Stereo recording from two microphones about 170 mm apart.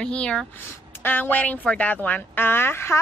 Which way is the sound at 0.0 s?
5° left (ahead or behind).